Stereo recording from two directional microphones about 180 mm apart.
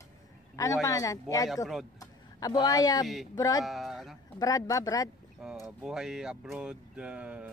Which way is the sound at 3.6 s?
Centre (ahead or behind).